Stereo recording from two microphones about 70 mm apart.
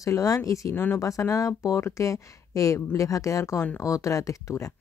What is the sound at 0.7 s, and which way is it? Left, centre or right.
Speech, left.